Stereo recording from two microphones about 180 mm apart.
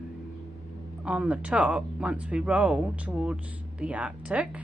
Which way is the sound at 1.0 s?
5° right (ahead or behind).